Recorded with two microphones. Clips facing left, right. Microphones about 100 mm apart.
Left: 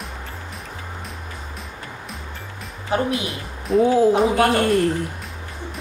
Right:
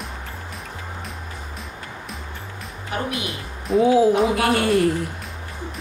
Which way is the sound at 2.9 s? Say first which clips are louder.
Left 5 dB; 35° left (ahead or behind).